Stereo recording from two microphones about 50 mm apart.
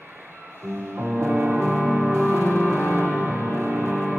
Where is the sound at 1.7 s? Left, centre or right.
Centre.